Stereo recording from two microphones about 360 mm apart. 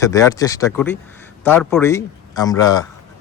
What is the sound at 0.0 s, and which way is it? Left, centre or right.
A man's voice, centre.